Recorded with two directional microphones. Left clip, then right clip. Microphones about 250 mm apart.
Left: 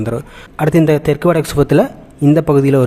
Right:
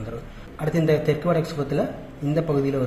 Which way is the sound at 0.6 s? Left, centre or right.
Left.